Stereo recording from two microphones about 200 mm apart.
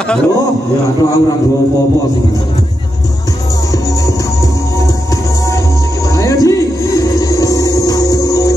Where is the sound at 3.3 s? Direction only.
15° left (ahead or behind).